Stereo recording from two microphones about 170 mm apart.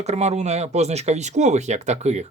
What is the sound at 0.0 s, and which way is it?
Speech, 40° right (ahead or behind).